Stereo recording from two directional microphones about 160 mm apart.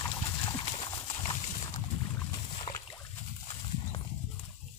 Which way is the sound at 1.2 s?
35° left (ahead or behind).